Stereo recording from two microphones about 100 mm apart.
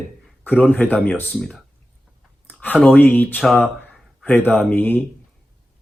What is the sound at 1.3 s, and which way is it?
Speech, centre (ahead or behind).